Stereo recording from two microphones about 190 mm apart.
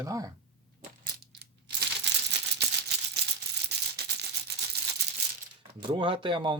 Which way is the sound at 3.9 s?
55° right (ahead or behind).